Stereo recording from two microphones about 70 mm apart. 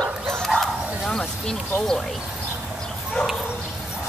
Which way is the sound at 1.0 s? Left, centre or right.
Centre.